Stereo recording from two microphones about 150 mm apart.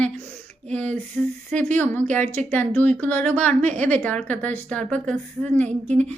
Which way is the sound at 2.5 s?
10° left (ahead or behind).